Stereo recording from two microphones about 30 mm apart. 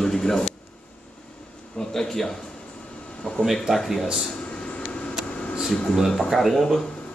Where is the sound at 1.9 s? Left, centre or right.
Centre.